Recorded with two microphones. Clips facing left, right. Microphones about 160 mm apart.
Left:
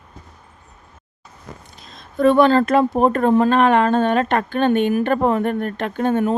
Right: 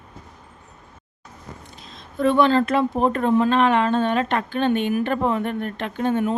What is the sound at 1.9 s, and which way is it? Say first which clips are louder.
Speech: left 5 dB; 45° left (ahead or behind).